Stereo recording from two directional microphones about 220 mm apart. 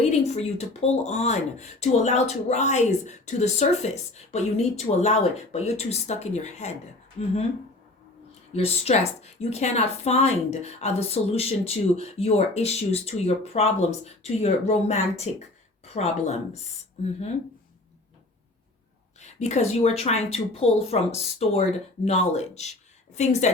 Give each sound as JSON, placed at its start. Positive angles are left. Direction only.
{"t": 0.0, "sound": "speech", "side_deg": 30}
{"t": 8.5, "sound": "a woman's voice", "side_deg": 30}
{"t": 19.2, "sound": "a woman's voice", "side_deg": 30}